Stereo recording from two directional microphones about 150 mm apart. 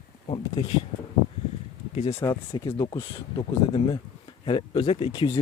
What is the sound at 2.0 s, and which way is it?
Speech, 45° left (ahead or behind).